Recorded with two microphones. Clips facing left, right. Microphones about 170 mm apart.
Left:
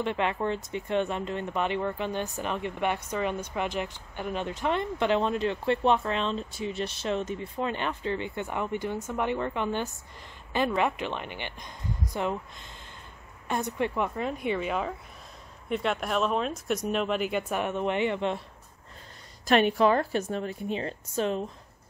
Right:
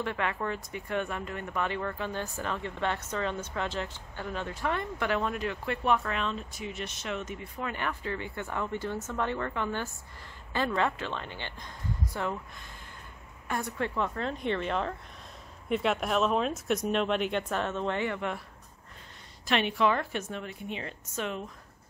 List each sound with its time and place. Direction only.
0.0 s speech: 20° left (ahead or behind)
13.5 s speech: 20° left (ahead or behind)
19.4 s a woman's voice: 45° left (ahead or behind)